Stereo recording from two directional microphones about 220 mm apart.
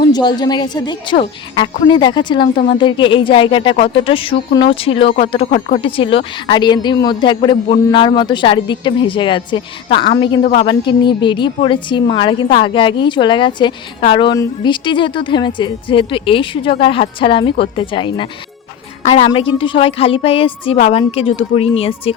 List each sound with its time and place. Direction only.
0.0 s a woman's voice: 20° left (ahead or behind)
5.5 s speech: 35° left (ahead or behind)
5.8 s a woman's voice: 25° left (ahead or behind)